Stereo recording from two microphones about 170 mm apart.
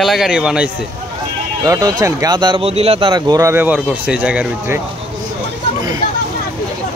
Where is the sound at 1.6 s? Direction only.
20° right (ahead or behind).